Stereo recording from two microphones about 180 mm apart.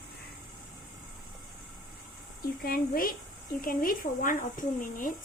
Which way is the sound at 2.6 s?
55° left (ahead or behind).